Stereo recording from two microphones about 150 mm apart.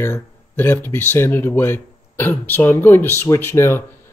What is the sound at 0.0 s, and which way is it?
Speech, 15° left (ahead or behind).